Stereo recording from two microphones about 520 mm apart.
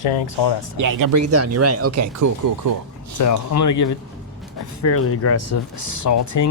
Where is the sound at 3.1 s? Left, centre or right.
Left.